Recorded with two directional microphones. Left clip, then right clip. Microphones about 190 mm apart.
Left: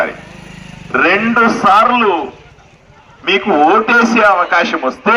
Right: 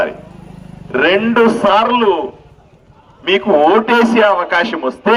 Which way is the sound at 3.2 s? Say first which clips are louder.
Even; 20° right (ahead or behind).